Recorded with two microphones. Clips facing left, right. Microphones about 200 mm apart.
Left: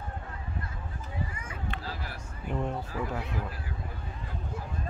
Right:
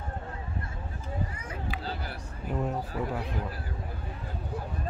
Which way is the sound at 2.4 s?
5° right (ahead or behind).